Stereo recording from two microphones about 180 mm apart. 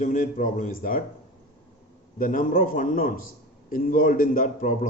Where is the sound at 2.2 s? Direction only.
50° left (ahead or behind).